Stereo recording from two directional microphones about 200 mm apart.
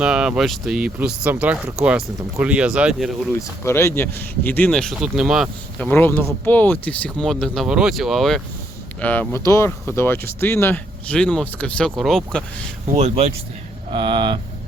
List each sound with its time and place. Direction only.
0.0 s speech: 5° right (ahead or behind)
3.6 s speech: 15° left (ahead or behind)
5.9 s speech: 10° left (ahead or behind)
12.9 s speech: 35° right (ahead or behind)